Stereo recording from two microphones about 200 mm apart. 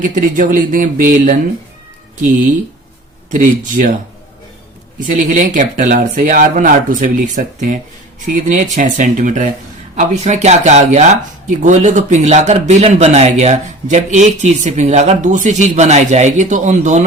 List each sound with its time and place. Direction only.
0.0 s speech: 40° right (ahead or behind)
3.3 s speech: 40° right (ahead or behind)
4.9 s speech: 40° right (ahead or behind)